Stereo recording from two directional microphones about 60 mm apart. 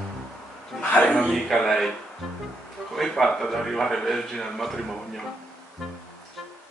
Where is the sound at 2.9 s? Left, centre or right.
Centre.